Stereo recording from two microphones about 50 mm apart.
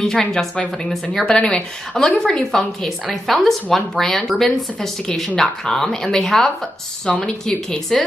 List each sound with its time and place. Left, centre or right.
0.0 s a woman's voice: centre
7.1 s speech: centre